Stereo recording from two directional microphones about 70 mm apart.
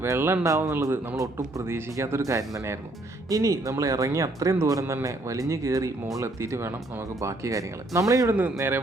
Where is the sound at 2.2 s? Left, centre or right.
Right.